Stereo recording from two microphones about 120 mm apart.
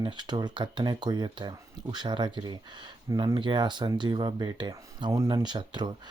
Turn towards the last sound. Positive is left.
turn(degrees=-40)  # may be behind; listen again after turning